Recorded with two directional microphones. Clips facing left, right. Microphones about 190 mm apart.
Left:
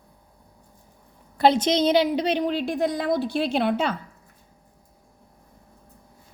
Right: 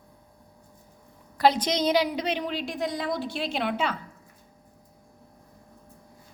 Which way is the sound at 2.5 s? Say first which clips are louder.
Left 6 dB; 50° left (ahead or behind).